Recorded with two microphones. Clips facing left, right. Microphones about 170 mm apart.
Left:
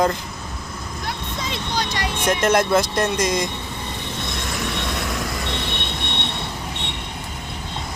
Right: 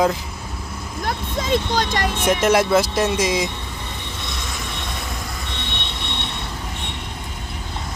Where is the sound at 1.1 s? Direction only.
45° right (ahead or behind).